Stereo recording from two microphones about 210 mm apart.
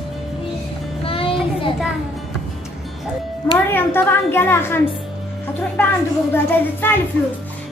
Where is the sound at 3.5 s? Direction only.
10° left (ahead or behind).